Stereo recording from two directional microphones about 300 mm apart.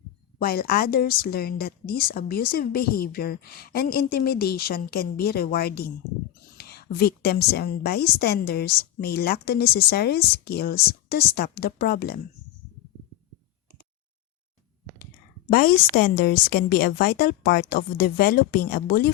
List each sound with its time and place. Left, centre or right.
0.3 s a woman's voice: left
15.4 s a woman's voice: left